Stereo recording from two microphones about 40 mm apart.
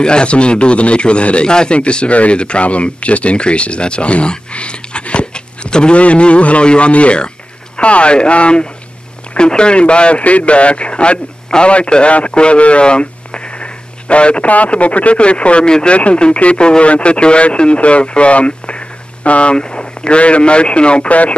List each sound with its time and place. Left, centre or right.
0.0 s speech: left
19.5 s speech: left